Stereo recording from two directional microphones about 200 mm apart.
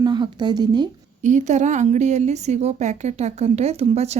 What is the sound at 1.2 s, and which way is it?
A woman's voice, 40° right (ahead or behind).